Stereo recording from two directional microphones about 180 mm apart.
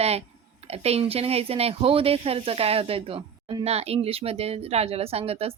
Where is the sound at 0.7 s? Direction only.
35° right (ahead or behind).